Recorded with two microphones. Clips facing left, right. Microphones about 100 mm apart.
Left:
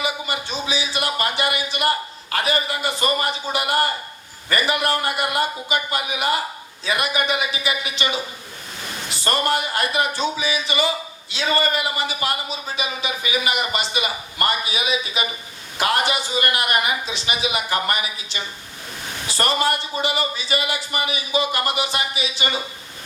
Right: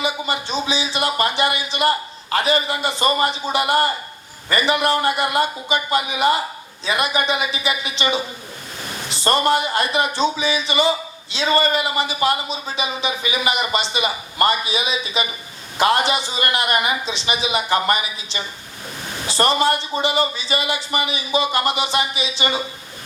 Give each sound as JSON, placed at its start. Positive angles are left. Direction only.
{"t": 0.0, "sound": "a man's voice", "side_deg": -25}